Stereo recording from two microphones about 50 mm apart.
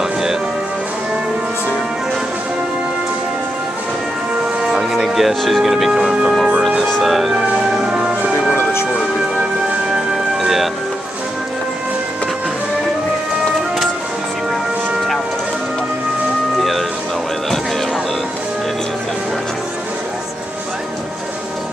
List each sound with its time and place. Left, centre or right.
0.0 s music: centre
4.6 s music: centre
6.9 s speech: centre
7.3 s music: centre
10.3 s music: centre
16.5 s vehicle: centre